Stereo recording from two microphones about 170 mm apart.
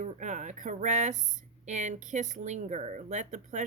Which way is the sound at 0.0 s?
45° right (ahead or behind).